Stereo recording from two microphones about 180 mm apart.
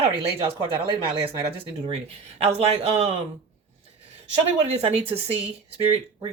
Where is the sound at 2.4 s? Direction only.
35° right (ahead or behind).